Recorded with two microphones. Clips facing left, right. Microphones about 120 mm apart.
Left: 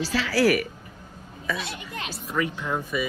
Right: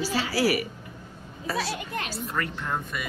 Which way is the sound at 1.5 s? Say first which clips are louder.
Right 6 dB; 35° right (ahead or behind).